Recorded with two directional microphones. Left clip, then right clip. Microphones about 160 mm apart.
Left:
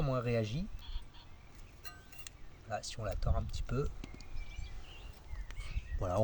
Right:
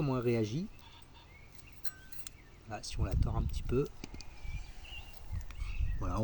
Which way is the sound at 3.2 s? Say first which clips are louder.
Left 1 dB; 60° left (ahead or behind).